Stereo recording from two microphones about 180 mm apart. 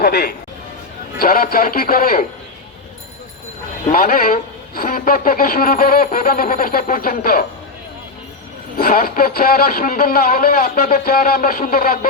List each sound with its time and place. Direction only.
0.0 s a man's voice: 60° left (ahead or behind)
3.9 s a man's voice: 55° left (ahead or behind)
8.8 s speech: 55° left (ahead or behind)